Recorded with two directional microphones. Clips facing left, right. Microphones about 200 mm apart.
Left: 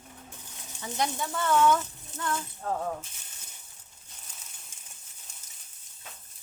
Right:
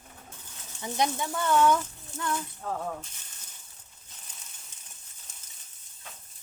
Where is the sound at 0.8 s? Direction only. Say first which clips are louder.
Right 3 dB; 20° right (ahead or behind).